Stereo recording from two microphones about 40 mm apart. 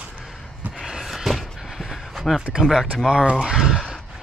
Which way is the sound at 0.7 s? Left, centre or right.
Centre.